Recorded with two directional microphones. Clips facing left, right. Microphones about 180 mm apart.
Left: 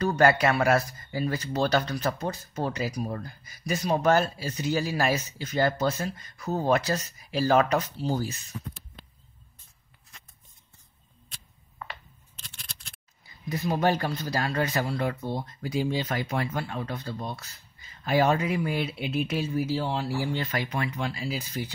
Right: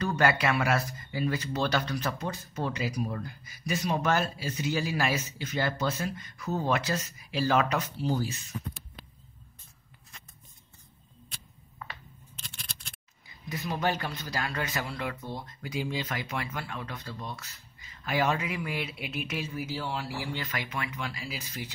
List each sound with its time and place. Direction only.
0.0 s speech: 40° left (ahead or behind)
13.5 s speech: 40° left (ahead or behind)